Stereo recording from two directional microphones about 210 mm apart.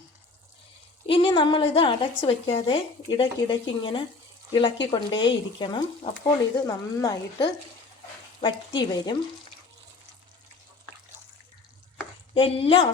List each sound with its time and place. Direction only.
1.0 s a woman's voice: 25° left (ahead or behind)
12.3 s a woman's voice: 25° left (ahead or behind)